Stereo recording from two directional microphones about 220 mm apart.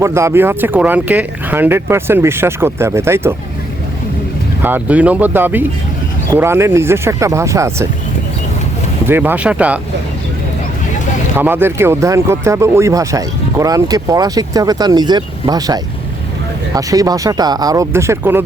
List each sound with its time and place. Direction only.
0.0 s speech: 10° right (ahead or behind)
4.6 s speech: 5° right (ahead or behind)
9.0 s speech: 10° right (ahead or behind)
11.3 s speech: 10° right (ahead or behind)